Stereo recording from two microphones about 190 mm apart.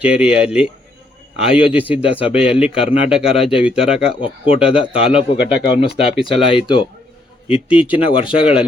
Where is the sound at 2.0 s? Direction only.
30° left (ahead or behind).